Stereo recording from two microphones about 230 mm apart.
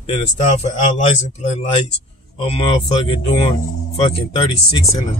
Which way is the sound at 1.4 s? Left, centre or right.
Left.